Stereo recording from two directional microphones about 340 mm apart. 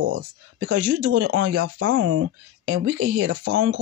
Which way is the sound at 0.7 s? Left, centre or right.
Right.